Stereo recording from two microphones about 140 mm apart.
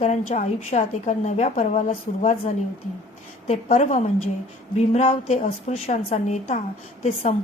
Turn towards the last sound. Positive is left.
turn(degrees=55)  # may be behind; listen again after turning